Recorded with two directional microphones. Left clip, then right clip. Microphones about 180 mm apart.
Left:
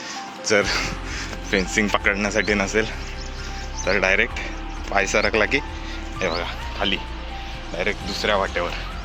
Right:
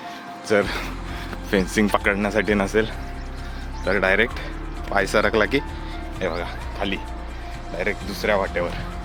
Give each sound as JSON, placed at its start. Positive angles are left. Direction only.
{"t": 0.4, "sound": "speech", "side_deg": -15}
{"t": 1.5, "sound": "speech", "side_deg": -30}
{"t": 3.8, "sound": "speech", "side_deg": -20}
{"t": 6.1, "sound": "speech", "side_deg": -10}
{"t": 8.1, "sound": "speech", "side_deg": -20}